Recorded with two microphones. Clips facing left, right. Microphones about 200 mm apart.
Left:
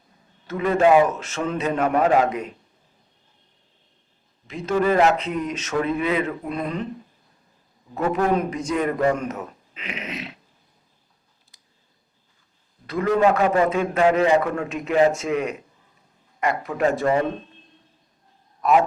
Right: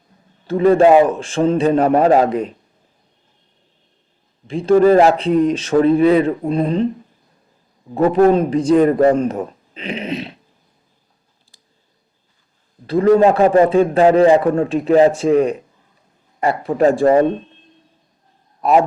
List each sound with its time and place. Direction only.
0.4 s a man's voice: 30° right (ahead or behind)
4.4 s a man's voice: 30° right (ahead or behind)
7.9 s a man's voice: 35° right (ahead or behind)
11.5 s clicking: 30° right (ahead or behind)
12.9 s a man's voice: 30° right (ahead or behind)
18.6 s a man's voice: 30° right (ahead or behind)